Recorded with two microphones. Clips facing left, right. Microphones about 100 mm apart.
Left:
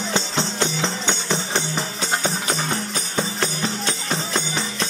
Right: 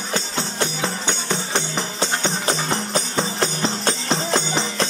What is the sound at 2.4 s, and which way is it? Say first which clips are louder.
Music: right 2 dB; 30° right (ahead or behind).